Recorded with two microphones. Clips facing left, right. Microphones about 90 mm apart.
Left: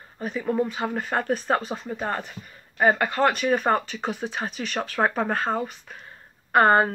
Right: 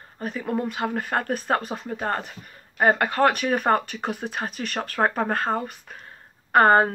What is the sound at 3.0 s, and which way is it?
Speech, 55° right (ahead or behind).